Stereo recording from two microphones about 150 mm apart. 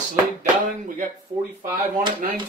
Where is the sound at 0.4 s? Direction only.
65° right (ahead or behind).